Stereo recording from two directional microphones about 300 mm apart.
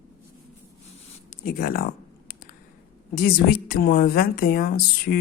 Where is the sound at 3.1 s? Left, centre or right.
Left.